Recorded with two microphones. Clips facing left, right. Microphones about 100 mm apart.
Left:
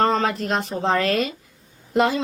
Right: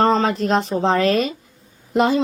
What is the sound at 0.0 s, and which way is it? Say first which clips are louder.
Speech: right 3 dB; 25° right (ahead or behind).